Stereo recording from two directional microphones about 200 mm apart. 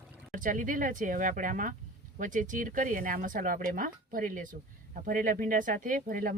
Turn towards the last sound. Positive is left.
turn(degrees=-45)  # may be behind; listen again after turning